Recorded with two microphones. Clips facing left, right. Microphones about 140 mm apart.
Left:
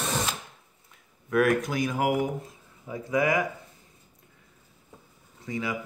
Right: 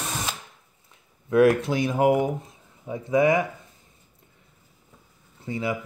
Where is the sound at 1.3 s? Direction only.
25° right (ahead or behind).